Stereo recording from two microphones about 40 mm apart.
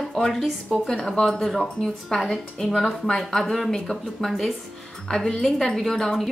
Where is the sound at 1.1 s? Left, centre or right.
Centre.